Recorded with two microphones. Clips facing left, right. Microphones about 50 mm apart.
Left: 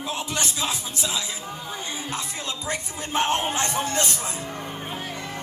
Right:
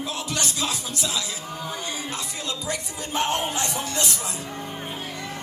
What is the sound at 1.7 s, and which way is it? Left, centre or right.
Speech, left.